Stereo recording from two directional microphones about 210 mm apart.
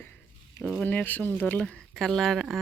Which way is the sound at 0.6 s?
Centre (ahead or behind).